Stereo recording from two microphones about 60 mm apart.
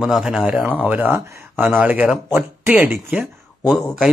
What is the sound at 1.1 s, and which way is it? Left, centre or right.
Speech, right.